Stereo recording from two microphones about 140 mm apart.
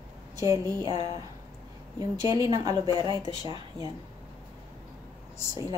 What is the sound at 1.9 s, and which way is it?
A woman's voice, 25° right (ahead or behind).